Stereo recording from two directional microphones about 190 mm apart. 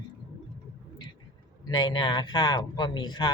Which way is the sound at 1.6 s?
20° left (ahead or behind).